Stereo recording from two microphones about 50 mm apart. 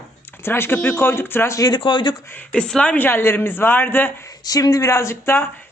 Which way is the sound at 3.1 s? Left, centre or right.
Left.